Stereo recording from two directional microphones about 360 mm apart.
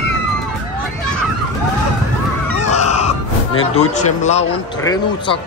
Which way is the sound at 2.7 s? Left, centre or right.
Centre.